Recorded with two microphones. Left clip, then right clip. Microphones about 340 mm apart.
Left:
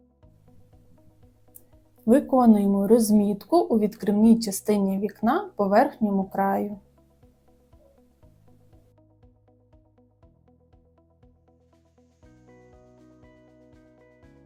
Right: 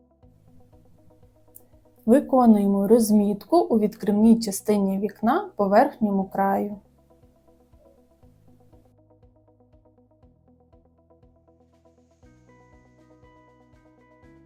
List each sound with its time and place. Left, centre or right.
2.0 s speech: left
13.0 s music: centre